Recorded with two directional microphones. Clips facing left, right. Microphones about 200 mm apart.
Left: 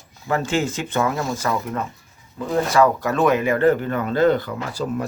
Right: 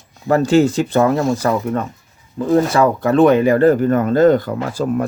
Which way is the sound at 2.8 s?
30° right (ahead or behind).